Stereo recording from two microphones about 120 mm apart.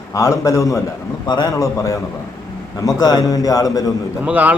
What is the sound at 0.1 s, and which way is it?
A man's voice, 30° left (ahead or behind).